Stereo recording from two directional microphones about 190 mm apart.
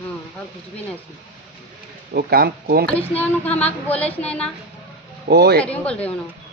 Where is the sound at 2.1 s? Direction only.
55° right (ahead or behind).